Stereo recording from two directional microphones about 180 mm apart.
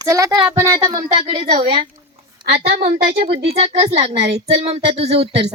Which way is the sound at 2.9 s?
60° right (ahead or behind).